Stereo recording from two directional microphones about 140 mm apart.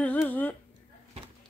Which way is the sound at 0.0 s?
10° left (ahead or behind).